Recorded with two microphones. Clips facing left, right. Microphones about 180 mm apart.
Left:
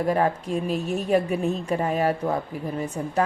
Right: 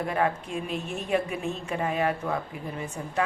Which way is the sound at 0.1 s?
40° left (ahead or behind).